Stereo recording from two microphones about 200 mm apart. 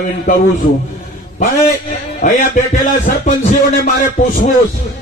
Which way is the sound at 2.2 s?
40° left (ahead or behind).